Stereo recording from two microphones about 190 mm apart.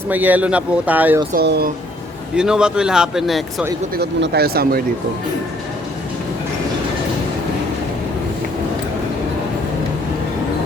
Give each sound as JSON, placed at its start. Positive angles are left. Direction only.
{"t": 0.1, "sound": "speech", "side_deg": -10}
{"t": 1.3, "sound": "speech", "side_deg": -55}
{"t": 2.3, "sound": "speech", "side_deg": -5}
{"t": 3.9, "sound": "speech", "side_deg": -60}